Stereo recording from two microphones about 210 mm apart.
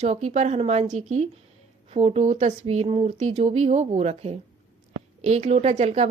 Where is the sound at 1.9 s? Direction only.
30° right (ahead or behind).